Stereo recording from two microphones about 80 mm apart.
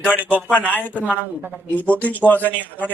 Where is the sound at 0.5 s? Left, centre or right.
Centre.